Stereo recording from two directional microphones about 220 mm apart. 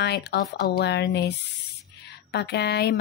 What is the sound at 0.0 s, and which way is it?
Speech, 50° left (ahead or behind).